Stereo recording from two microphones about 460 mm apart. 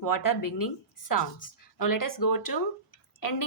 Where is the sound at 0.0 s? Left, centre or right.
Left.